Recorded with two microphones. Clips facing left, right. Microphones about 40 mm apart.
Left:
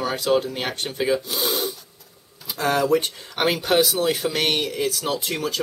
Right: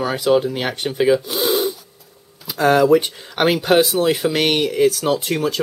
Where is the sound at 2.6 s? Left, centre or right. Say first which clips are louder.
Right 7 dB; right.